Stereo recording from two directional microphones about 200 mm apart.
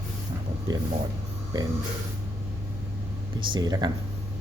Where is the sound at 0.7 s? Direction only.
20° right (ahead or behind).